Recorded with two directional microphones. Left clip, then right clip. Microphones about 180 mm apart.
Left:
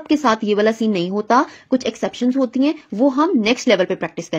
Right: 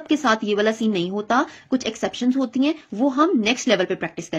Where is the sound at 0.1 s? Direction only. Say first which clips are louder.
Left 3 dB; 25° left (ahead or behind).